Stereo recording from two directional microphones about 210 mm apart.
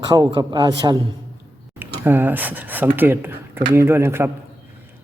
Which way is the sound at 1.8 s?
10° right (ahead or behind).